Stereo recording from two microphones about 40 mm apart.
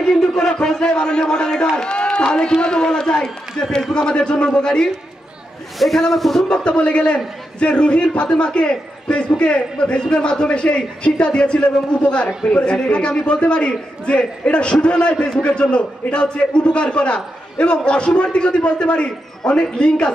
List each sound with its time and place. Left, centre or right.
0.4 s a man's voice: left
5.8 s a man's voice: centre
6.5 s a man's voice: left